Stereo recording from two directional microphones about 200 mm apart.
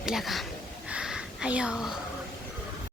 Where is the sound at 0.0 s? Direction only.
Centre (ahead or behind).